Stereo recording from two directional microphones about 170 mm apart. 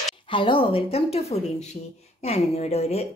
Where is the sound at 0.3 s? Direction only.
30° left (ahead or behind).